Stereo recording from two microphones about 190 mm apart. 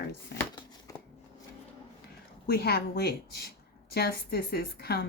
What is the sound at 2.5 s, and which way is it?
A woman's voice, 55° left (ahead or behind).